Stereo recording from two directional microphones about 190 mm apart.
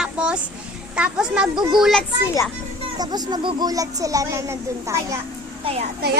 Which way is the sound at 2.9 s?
20° right (ahead or behind).